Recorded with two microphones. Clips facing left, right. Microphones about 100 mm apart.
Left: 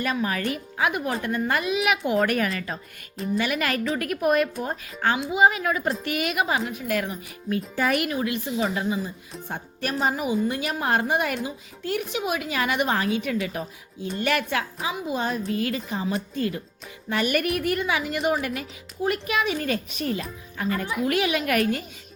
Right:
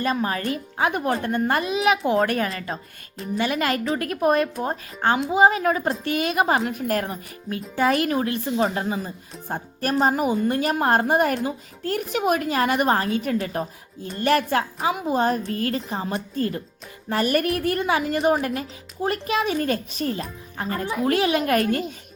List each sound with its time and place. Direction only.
0.0 s a woman's voice: 35° right (ahead or behind)
7.8 s a woman's voice: 30° right (ahead or behind)